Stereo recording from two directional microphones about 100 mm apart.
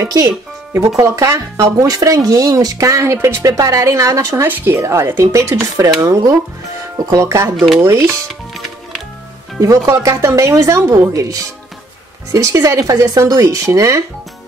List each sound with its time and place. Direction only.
0.0 s speech: 35° right (ahead or behind)
4.5 s speech: 20° right (ahead or behind)
8.3 s music: centre (ahead or behind)
9.6 s speech: 30° right (ahead or behind)